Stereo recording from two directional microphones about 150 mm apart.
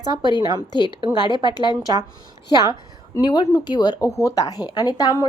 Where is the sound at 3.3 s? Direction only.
30° left (ahead or behind).